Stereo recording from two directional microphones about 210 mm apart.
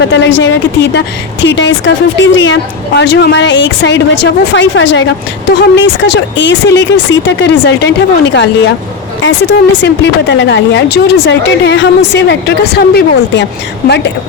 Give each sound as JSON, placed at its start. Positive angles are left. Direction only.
{"t": 0.0, "sound": "speech", "side_deg": 60}